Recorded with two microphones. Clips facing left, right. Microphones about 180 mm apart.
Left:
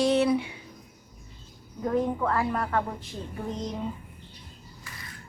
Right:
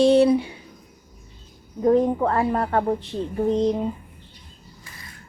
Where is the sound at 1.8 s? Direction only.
30° right (ahead or behind).